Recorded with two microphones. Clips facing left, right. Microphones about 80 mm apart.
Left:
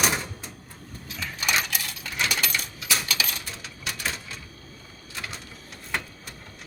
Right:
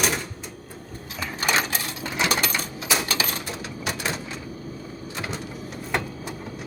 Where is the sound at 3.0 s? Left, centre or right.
Right.